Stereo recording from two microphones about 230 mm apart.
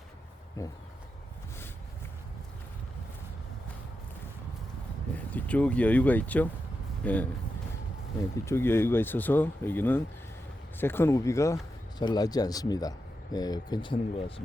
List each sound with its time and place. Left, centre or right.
0.6 s speech: centre
5.1 s speech: centre
8.4 s speech: centre